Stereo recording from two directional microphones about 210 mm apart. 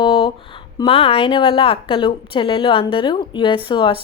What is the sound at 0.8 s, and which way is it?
A woman's voice, 25° left (ahead or behind).